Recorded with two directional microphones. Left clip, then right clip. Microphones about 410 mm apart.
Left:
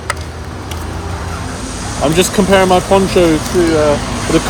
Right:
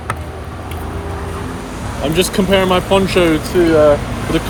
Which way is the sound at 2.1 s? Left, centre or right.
Centre.